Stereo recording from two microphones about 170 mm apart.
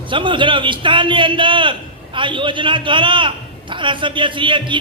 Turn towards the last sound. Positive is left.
turn(degrees=-30)  # may be behind; listen again after turning